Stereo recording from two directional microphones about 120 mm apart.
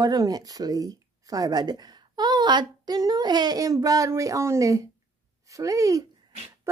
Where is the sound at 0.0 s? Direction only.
30° right (ahead or behind).